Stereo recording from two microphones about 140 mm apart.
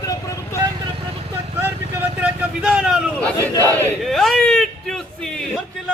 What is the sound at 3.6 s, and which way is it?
Battle cry, 25° right (ahead or behind).